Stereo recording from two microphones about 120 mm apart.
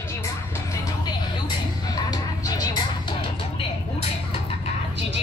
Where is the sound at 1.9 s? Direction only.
30° left (ahead or behind).